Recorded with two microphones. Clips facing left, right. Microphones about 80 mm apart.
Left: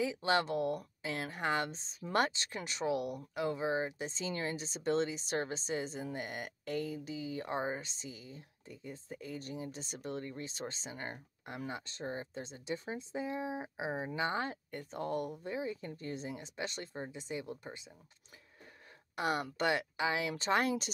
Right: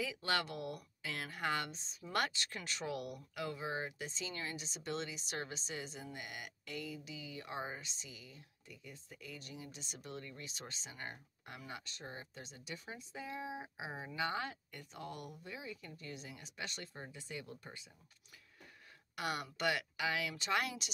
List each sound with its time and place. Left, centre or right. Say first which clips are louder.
0.0 s speech: left 6 dB; left
19.1 s speech: left 6 dB; left